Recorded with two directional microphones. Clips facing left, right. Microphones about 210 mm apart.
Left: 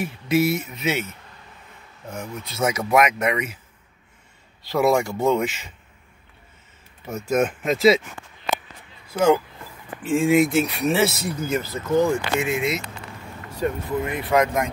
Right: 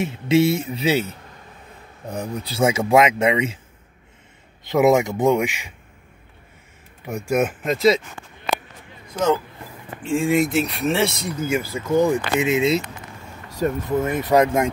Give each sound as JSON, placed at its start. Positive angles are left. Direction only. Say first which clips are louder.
{"t": 0.0, "sound": "speech", "louder": "right 3 dB", "side_deg": -25}
{"t": 4.6, "sound": "speech", "louder": "right 3 dB", "side_deg": -20}
{"t": 7.1, "sound": "speech", "louder": "right 1 dB", "side_deg": -15}
{"t": 7.6, "sound": "speech", "louder": "left 2 dB", "side_deg": 0}
{"t": 9.0, "sound": "speech", "louder": "left 2 dB", "side_deg": 10}
{"t": 11.4, "sound": "speech", "louder": "right 3 dB", "side_deg": -10}
{"t": 13.6, "sound": "speech", "louder": "right 3 dB", "side_deg": -45}